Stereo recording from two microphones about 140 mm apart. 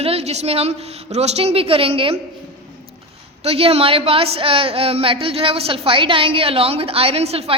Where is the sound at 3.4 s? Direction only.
45° right (ahead or behind).